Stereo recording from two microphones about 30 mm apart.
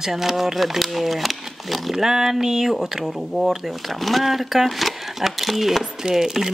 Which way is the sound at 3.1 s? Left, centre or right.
Centre.